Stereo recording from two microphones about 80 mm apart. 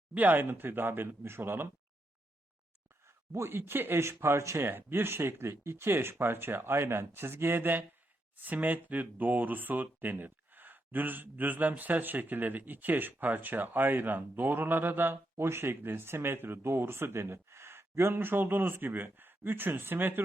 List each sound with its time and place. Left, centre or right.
0.1 s speech: right
3.3 s speech: right